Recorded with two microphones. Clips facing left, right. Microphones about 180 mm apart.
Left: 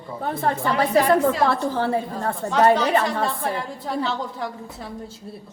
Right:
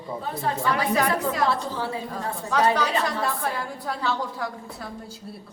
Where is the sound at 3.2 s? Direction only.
25° left (ahead or behind).